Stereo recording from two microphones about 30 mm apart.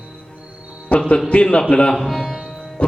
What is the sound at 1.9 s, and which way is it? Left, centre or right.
Speech, centre.